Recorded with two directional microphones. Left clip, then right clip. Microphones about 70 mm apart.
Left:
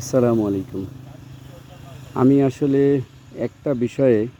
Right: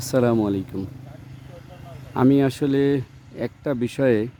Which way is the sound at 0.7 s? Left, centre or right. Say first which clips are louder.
Left 2 dB; right.